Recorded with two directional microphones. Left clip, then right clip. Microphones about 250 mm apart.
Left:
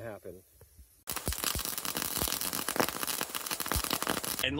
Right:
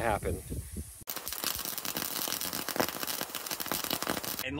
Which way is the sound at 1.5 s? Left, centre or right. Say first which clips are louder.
Even; centre.